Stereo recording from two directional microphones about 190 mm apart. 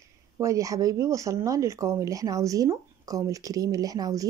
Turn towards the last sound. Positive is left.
turn(degrees=-20)  # may be behind; listen again after turning